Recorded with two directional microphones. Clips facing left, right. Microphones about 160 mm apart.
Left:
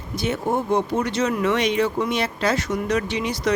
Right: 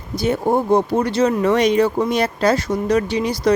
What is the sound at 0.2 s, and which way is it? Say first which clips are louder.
Speech: right 5 dB; 35° right (ahead or behind).